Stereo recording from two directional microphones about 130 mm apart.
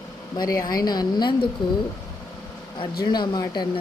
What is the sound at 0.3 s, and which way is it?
Speech, 30° left (ahead or behind).